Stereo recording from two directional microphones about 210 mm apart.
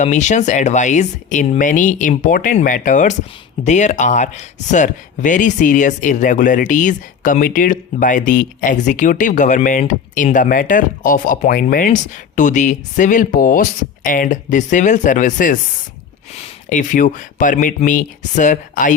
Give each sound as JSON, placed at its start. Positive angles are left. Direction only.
{"t": 0.0, "sound": "speech", "side_deg": 35}